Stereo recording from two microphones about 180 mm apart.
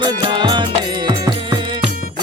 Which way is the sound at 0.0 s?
25° right (ahead or behind).